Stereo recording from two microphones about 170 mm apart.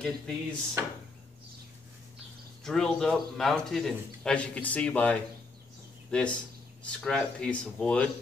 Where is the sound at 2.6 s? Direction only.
5° left (ahead or behind).